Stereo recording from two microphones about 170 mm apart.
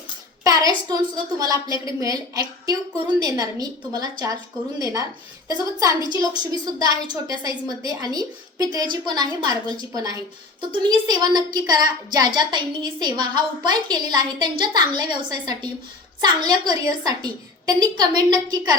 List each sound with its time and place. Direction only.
0.4 s a sound: 20° right (ahead or behind)
1.4 s a woman's voice: 20° right (ahead or behind)
6.1 s a woman's voice: 25° right (ahead or behind)